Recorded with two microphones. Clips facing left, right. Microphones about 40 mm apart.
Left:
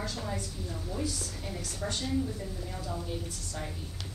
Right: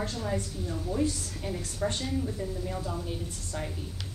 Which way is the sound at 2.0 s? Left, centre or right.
Centre.